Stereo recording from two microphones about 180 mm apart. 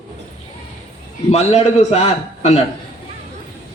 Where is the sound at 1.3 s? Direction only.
35° left (ahead or behind).